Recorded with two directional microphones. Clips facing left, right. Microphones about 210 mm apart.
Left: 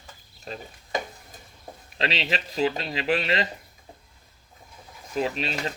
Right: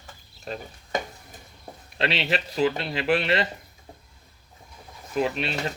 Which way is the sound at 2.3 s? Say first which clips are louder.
Right 2 dB; 40° right (ahead or behind).